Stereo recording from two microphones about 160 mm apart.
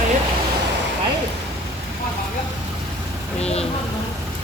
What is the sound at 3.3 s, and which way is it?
Speech, 40° left (ahead or behind).